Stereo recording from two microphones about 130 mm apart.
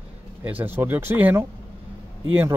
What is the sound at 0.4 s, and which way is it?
Speech, 15° right (ahead or behind).